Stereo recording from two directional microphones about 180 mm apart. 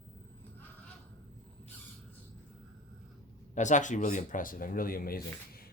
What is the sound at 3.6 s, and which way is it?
Speech, 45° left (ahead or behind).